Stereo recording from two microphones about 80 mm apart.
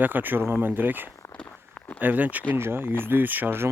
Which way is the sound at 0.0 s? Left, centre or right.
Right.